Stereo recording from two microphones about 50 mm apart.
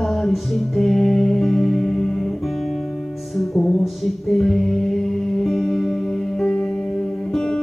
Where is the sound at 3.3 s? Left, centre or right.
Centre.